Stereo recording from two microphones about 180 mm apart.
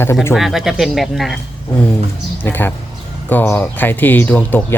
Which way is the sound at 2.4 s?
10° left (ahead or behind).